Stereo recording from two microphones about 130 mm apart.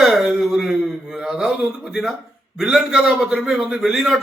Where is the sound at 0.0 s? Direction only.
Centre (ahead or behind).